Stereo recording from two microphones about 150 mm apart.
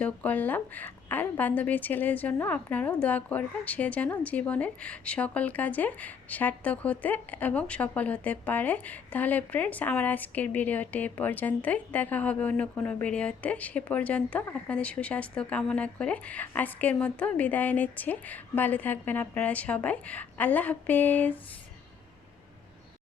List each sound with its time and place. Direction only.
0.0 s a woman's voice: 10° left (ahead or behind)